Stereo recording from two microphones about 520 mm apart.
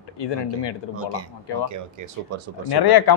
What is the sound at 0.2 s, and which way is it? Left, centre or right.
Speech, left.